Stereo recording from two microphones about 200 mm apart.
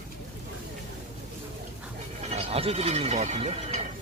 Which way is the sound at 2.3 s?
30° right (ahead or behind).